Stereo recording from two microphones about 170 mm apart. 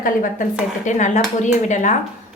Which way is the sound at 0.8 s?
45° left (ahead or behind).